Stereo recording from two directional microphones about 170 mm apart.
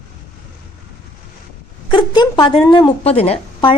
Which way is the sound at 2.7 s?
30° left (ahead or behind).